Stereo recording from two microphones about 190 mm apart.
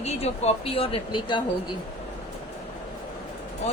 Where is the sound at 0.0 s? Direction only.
35° left (ahead or behind).